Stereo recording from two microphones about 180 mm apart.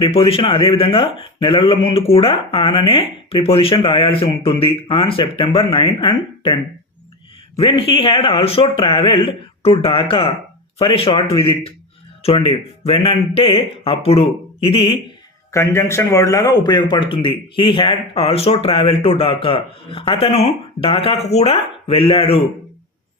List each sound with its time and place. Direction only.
0.0 s speech: 30° left (ahead or behind)
15.5 s a man's voice: 15° left (ahead or behind); by 22.4 s 30° left (ahead or behind)